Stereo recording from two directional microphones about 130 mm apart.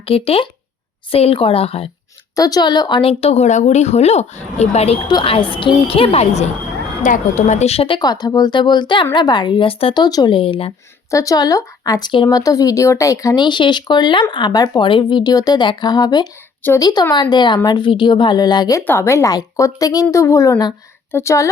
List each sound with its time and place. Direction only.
0.0 s speech: 50° left (ahead or behind)
2.3 s speech: 30° left (ahead or behind); by 4.9 s 55° left (ahead or behind)
5.0 s speech: 40° left (ahead or behind); by 6.5 s 55° left (ahead or behind)
7.0 s a woman's voice: 70° left (ahead or behind); by 7.9 s 50° left (ahead or behind)
7.9 s speech: 30° left (ahead or behind)
11.1 s speech: 25° left (ahead or behind)
18.9 s a woman's voice: 20° left (ahead or behind)